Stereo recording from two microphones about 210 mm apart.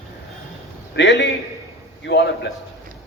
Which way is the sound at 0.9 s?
55° left (ahead or behind).